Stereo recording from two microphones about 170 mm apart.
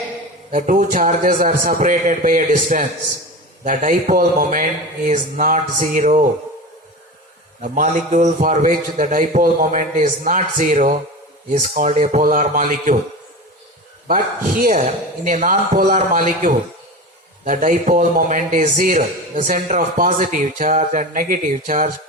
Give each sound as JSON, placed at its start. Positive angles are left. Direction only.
{"t": 0.5, "sound": "a man's voice", "side_deg": -50}
{"t": 7.6, "sound": "a man's voice", "side_deg": -50}
{"t": 14.1, "sound": "a man's voice", "side_deg": -50}